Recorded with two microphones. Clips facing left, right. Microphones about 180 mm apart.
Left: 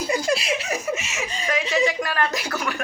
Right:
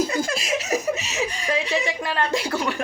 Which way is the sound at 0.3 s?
40° right (ahead or behind).